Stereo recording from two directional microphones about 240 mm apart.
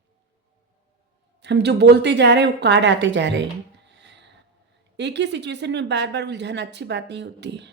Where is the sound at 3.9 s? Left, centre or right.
Right.